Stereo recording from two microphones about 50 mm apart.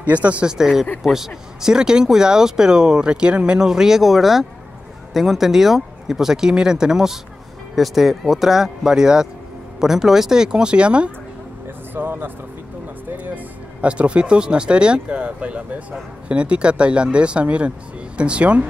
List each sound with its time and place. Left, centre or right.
0.0 s speech: right
0.5 s speech: centre
11.9 s speech: right
13.1 s music: right
13.7 s speech: right